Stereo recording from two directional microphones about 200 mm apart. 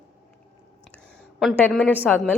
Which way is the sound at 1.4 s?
5° left (ahead or behind).